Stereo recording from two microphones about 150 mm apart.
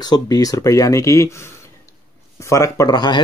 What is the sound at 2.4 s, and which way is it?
Speech, 20° left (ahead or behind).